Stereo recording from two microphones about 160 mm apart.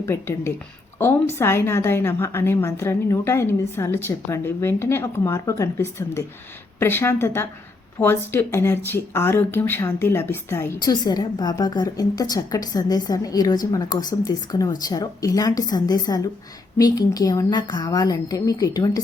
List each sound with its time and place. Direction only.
0.0 s a woman's voice: 15° left (ahead or behind)